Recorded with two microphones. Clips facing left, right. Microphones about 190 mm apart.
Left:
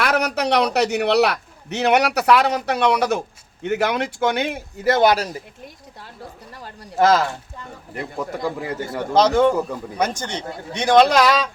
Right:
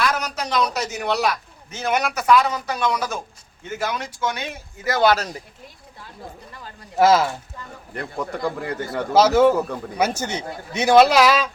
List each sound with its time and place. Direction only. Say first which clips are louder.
0.0 s a man's voice: left 4 dB; 65° left (ahead or behind)
4.8 s speech: left 2 dB; 25° left (ahead or behind)
6.9 s speech: right 1 dB; 5° right (ahead or behind)
7.9 s speech: left 1 dB; 5° left (ahead or behind)
9.1 s a man's voice: right 1 dB; 5° right (ahead or behind)